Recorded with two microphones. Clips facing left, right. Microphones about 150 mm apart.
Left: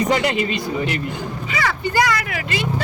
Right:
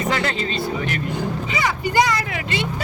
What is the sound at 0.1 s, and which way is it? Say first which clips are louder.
Speech: left 4 dB; 15° left (ahead or behind).